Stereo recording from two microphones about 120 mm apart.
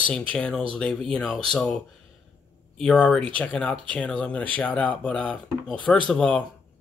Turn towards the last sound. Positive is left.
turn(degrees=10)  # may be behind; listen again after turning